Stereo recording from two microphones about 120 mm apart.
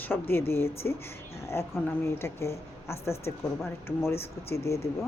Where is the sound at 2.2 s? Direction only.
20° left (ahead or behind).